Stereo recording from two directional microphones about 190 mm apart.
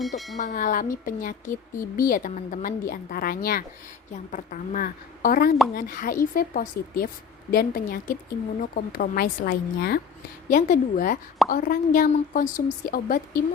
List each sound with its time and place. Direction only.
0.0 s speech: centre (ahead or behind)
0.3 s speech: 40° left (ahead or behind)